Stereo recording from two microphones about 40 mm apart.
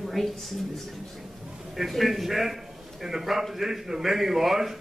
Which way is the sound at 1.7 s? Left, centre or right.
Centre.